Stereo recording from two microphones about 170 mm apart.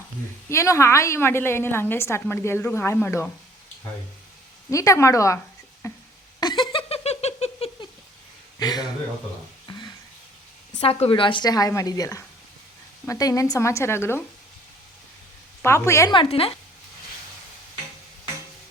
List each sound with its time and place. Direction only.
0.5 s a woman's voice: 15° left (ahead or behind)
4.7 s a woman's voice: 20° left (ahead or behind)
5.8 s a sound: 15° left (ahead or behind)
6.4 s laughter: 25° left (ahead or behind)
8.5 s speech: 25° left (ahead or behind)
9.6 s a sound: 25° left (ahead or behind)
10.8 s a woman's voice: 35° left (ahead or behind); by 14.3 s 15° left (ahead or behind)
15.6 s a woman's voice: 15° left (ahead or behind)
16.1 s a woman's voice: 35° left (ahead or behind)